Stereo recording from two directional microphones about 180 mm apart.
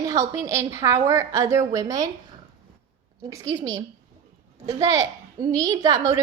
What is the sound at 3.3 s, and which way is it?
A woman's voice, 20° right (ahead or behind).